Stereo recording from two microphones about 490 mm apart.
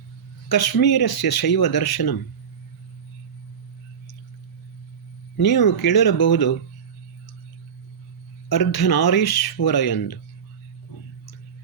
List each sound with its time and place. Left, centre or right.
0.4 s speech: left
5.4 s speech: left
8.4 s speech: left